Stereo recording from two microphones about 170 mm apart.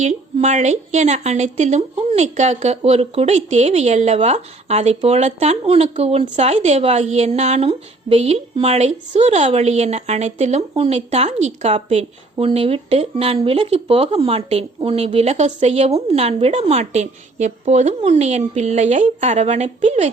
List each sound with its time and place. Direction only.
0.0 s speech: 40° right (ahead or behind)